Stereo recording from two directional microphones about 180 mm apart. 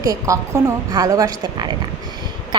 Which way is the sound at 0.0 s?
20° right (ahead or behind).